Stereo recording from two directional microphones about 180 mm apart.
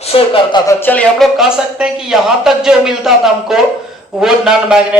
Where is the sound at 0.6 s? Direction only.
15° left (ahead or behind).